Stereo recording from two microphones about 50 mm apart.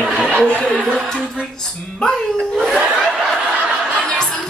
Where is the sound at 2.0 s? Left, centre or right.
Centre.